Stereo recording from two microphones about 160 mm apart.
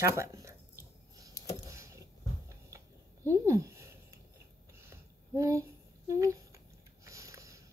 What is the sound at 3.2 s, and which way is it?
Speech, 20° right (ahead or behind).